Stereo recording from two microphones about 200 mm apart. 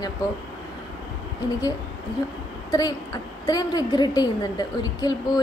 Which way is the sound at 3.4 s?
20° left (ahead or behind).